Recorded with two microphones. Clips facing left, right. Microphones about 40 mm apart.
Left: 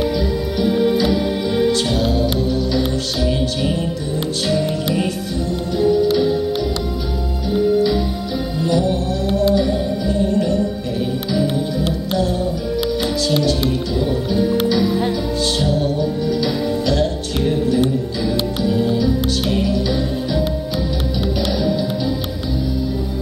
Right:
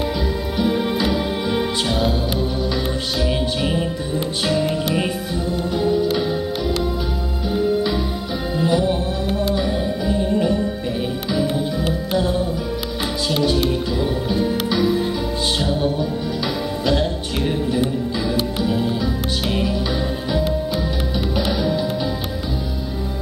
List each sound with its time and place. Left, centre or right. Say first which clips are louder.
0.6 s music: left 4 dB; centre
5.8 s music: left 5 dB; centre
7.5 s music: left 4 dB; centre
12.1 s music: even; centre
13.4 s music: even; centre
21.4 s music: left 1 dB; centre